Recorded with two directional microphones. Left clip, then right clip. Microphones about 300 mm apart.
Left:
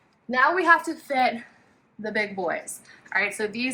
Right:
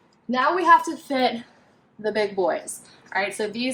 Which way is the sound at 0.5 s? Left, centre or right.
Centre.